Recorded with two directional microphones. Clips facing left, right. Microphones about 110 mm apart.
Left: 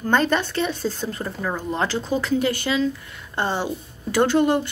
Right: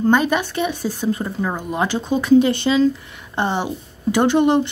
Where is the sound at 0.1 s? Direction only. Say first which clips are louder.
Left 2 dB; 10° right (ahead or behind).